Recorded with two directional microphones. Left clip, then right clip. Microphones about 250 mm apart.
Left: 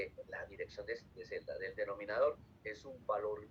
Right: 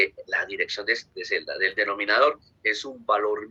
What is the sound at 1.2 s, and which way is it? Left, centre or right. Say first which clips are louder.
A man's voice: right 18 dB; right.